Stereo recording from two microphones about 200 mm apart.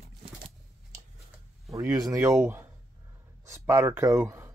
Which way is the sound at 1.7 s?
15° right (ahead or behind).